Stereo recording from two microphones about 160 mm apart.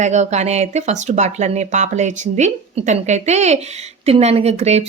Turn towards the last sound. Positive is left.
turn(degrees=-45)  # may be behind; listen again after turning